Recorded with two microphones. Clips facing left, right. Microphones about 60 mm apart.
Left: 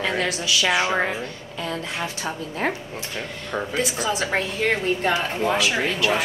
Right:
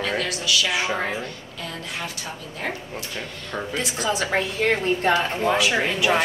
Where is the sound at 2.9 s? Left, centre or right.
Centre.